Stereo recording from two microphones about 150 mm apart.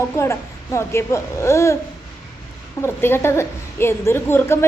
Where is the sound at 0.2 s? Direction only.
20° left (ahead or behind).